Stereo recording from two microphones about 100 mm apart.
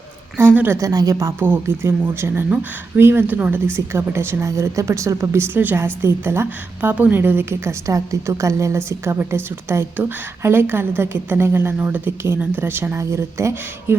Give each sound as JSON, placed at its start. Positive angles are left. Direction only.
{"t": 0.3, "sound": "a woman's voice", "side_deg": -20}
{"t": 0.8, "sound": "a woman's voice", "side_deg": -35}